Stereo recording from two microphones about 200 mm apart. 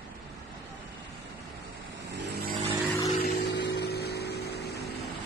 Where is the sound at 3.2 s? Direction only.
55° left (ahead or behind).